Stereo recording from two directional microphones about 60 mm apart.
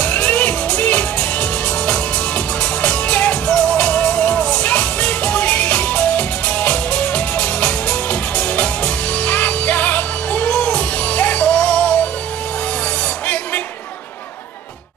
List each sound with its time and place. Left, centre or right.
0.0 s music: left